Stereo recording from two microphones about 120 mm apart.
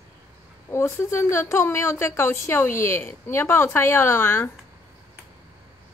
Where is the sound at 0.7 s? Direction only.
20° left (ahead or behind).